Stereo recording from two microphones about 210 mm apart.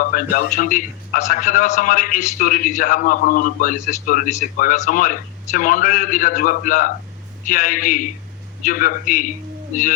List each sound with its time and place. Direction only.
0.0 s a man's voice: 40° left (ahead or behind)